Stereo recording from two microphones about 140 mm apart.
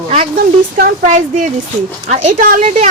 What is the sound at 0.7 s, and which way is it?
A woman's voice, 85° right.